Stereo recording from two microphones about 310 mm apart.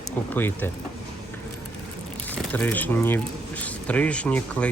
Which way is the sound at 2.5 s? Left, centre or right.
Centre.